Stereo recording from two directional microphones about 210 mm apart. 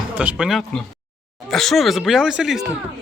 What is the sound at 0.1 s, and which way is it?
Speech, 5° right (ahead or behind).